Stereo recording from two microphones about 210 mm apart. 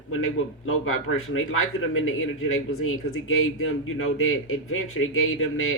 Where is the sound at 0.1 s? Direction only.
80° left.